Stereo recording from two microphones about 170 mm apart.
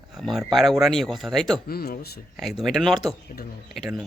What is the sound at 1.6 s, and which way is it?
Speech, 65° left (ahead or behind).